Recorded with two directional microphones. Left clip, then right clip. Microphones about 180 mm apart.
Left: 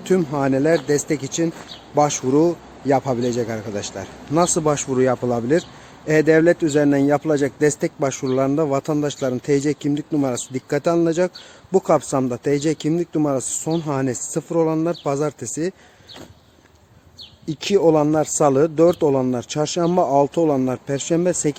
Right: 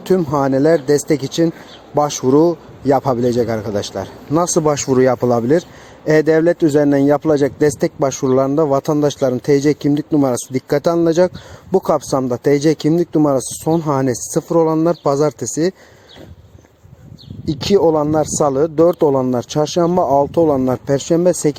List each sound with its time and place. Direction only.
0.0 s speech: 25° right (ahead or behind)
17.4 s speech: 30° right (ahead or behind)